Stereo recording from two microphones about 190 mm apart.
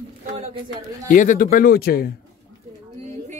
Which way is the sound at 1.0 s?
45° left (ahead or behind).